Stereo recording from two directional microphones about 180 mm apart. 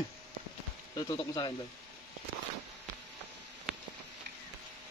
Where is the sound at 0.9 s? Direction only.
20° left (ahead or behind).